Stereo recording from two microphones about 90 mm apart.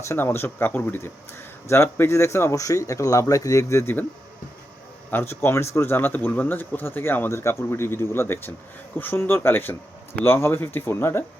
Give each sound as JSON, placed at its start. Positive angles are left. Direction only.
{"t": 0.1, "sound": "speech", "side_deg": 25}
{"t": 5.1, "sound": "speech", "side_deg": 25}